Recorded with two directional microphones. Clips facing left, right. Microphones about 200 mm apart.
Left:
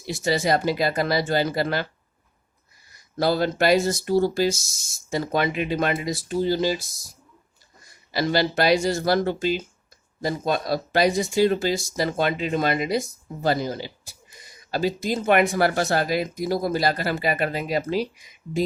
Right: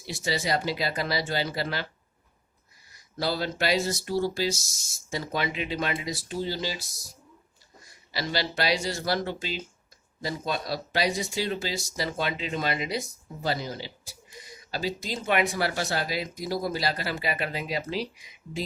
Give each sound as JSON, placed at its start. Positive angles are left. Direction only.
{"t": 0.1, "sound": "speech", "side_deg": 50}
{"t": 3.2, "sound": "speech", "side_deg": 50}
{"t": 8.1, "sound": "speech", "side_deg": 50}